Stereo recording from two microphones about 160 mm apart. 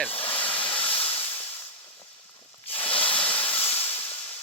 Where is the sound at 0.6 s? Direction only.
35° left (ahead or behind).